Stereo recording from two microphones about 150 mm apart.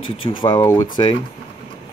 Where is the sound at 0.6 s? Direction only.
20° left (ahead or behind).